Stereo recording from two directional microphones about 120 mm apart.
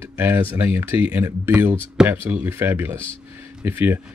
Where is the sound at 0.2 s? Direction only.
15° right (ahead or behind).